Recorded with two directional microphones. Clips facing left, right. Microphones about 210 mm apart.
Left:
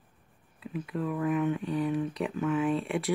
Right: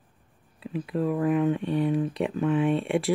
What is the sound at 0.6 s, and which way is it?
Speech, 30° right (ahead or behind).